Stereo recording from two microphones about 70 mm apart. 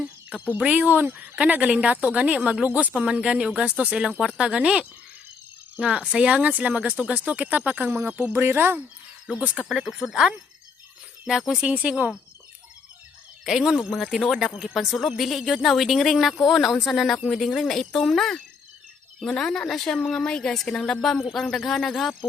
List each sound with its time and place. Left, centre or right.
0.0 s music: centre
0.6 s speech: centre
9.6 s speech: centre
11.3 s speech: centre
11.6 s speech: centre
13.4 s a woman's voice: centre